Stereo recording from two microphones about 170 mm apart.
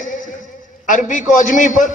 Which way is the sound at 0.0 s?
50° left (ahead or behind).